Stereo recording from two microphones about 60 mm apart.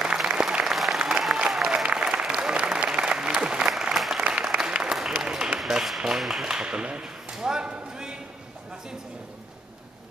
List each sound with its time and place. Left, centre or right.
0.2 s applause: centre
4.2 s applause: centre
5.6 s speech: centre